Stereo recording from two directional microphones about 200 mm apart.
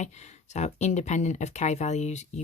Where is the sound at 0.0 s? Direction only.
35° left (ahead or behind).